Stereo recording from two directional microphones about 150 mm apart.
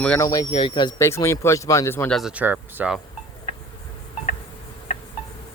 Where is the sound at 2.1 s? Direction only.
5° right (ahead or behind).